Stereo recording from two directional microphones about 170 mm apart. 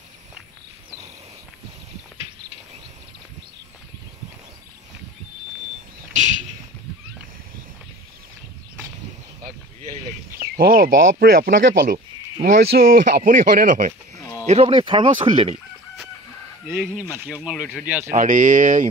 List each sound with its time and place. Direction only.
10.4 s speech: 60° right (ahead or behind)
11.4 s speech: 45° right (ahead or behind)
12.7 s speech: 60° right (ahead or behind); by 14.7 s 40° right (ahead or behind)
14.7 s speech: 30° right (ahead or behind)
16.7 s speech: 5° right (ahead or behind)
18.1 s speech: 50° right (ahead or behind)